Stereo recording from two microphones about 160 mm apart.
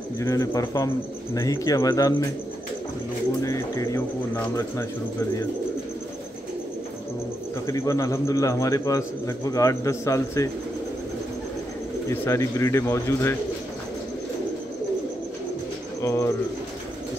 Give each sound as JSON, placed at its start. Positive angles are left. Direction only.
{"t": 0.2, "sound": "a man's voice", "side_deg": 20}
{"t": 3.4, "sound": "a man's voice", "side_deg": 20}
{"t": 7.6, "sound": "a man's voice", "side_deg": 20}
{"t": 12.1, "sound": "a man's voice", "side_deg": 20}
{"t": 16.0, "sound": "speech", "side_deg": 20}